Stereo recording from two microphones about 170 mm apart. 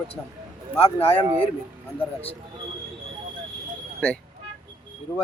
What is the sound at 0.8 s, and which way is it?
Speech, 35° left (ahead or behind).